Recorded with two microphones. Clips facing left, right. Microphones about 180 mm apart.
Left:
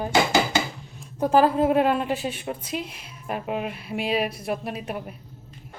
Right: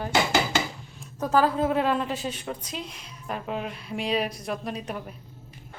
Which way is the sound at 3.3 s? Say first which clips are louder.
Left 3 dB; 10° left (ahead or behind).